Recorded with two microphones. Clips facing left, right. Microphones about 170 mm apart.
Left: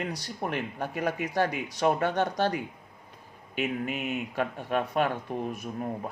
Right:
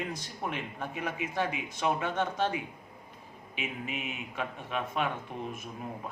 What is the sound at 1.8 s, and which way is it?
Speech, 40° left (ahead or behind).